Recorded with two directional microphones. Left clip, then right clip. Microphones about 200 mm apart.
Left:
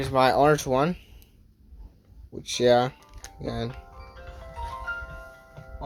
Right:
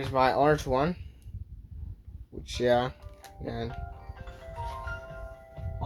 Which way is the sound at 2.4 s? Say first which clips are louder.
Left 5 dB; 25° left (ahead or behind).